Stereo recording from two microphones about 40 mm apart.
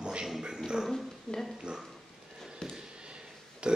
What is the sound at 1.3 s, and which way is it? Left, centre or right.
Speech, centre.